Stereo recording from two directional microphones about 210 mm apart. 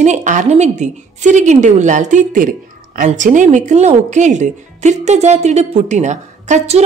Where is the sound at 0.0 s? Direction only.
35° right (ahead or behind).